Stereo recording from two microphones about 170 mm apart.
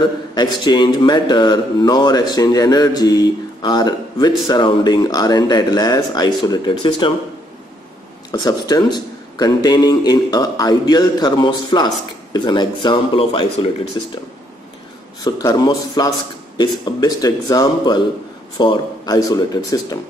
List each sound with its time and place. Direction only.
0.3 s a man's voice: 25° left (ahead or behind)
8.3 s a man's voice: 20° left (ahead or behind)
15.2 s a man's voice: 25° left (ahead or behind)